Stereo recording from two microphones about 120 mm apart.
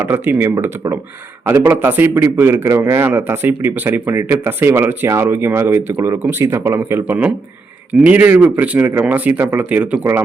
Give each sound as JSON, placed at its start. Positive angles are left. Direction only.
{"t": 0.0, "sound": "a man's voice", "side_deg": -15}